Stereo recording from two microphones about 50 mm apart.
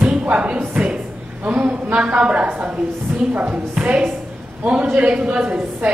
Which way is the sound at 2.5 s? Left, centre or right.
Right.